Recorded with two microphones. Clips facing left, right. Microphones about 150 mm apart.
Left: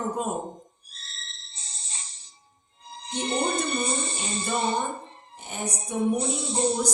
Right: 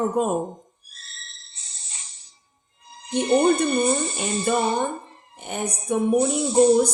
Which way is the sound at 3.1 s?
60° right (ahead or behind).